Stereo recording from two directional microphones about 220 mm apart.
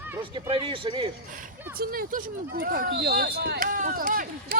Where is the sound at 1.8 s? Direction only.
40° right (ahead or behind).